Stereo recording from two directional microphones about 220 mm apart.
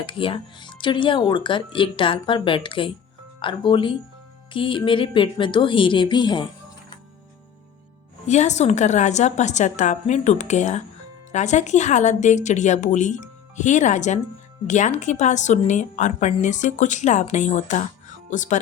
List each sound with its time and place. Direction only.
0.0 s speech: 25° left (ahead or behind)
8.3 s a woman's voice: 30° left (ahead or behind)